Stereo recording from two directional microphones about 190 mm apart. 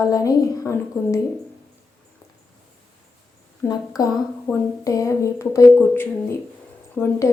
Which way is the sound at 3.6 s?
20° left (ahead or behind).